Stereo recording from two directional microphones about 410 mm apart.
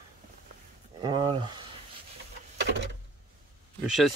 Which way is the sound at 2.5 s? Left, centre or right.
Right.